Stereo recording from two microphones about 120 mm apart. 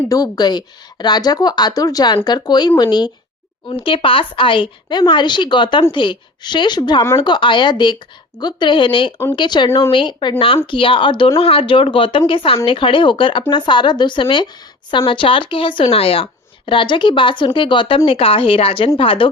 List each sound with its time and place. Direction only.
0.1 s a woman's voice: 35° left (ahead or behind)
3.8 s a woman's voice: 45° left (ahead or behind)